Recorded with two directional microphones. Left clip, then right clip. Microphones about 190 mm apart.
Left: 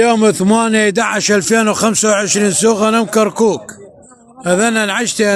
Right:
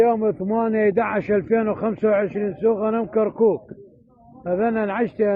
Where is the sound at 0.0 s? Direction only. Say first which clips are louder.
Left 7 dB; 35° left (ahead or behind).